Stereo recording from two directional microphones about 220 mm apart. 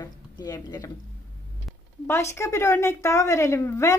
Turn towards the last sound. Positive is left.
turn(degrees=15)  # may be behind; listen again after turning